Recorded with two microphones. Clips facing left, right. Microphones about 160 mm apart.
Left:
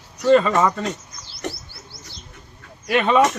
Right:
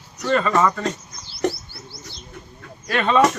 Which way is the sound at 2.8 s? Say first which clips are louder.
Left 2 dB; 15° left (ahead or behind).